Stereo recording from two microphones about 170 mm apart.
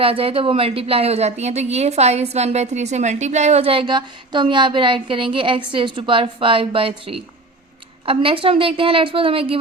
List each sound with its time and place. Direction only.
0.0 s a woman's voice: 35° right (ahead or behind)